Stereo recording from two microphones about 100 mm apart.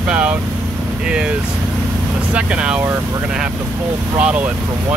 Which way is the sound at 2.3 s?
10° right (ahead or behind).